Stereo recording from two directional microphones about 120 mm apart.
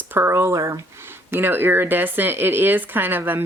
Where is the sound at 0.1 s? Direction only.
20° right (ahead or behind).